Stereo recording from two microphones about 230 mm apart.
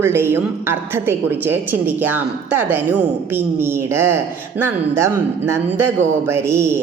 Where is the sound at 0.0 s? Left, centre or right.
Centre.